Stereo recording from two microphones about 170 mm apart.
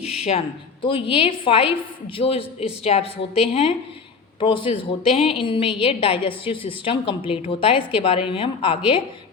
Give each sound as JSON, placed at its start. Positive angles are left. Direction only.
{"t": 0.0, "sound": "a woman's voice", "side_deg": 35}